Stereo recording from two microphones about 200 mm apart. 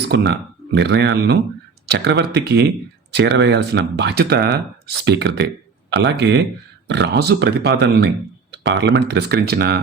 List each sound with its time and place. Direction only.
0.1 s speech: 55° right (ahead or behind)